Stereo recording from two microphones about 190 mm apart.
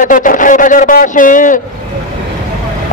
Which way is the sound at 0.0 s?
45° left (ahead or behind).